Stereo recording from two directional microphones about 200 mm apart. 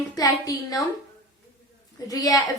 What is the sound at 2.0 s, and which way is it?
Speech, 15° left (ahead or behind).